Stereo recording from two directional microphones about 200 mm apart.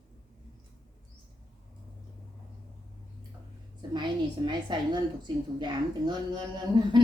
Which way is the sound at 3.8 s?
20° right (ahead or behind).